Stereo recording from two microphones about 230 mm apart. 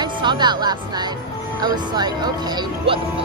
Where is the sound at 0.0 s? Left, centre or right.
Centre.